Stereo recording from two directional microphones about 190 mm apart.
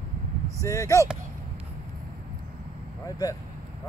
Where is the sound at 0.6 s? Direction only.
15° left (ahead or behind).